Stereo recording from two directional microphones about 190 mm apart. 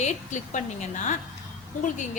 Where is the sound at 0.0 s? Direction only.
40° left (ahead or behind).